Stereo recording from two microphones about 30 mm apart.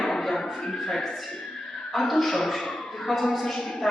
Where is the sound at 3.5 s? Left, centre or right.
Centre.